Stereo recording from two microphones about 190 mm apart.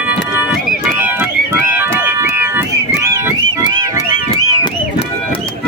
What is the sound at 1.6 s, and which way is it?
Car alarm, 10° right (ahead or behind).